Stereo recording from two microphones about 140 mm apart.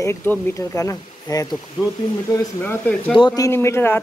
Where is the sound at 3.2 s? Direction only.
25° left (ahead or behind).